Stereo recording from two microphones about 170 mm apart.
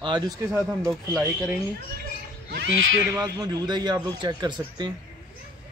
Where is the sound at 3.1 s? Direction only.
25° right (ahead or behind).